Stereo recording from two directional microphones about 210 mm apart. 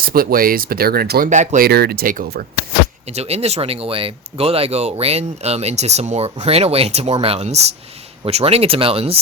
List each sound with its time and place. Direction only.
0.0 s speech: 45° right (ahead or behind)
1.3 s speech: 35° right (ahead or behind)
3.1 s speech: 30° right (ahead or behind)